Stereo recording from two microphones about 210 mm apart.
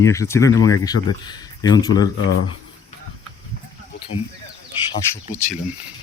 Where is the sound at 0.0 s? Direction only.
15° left (ahead or behind).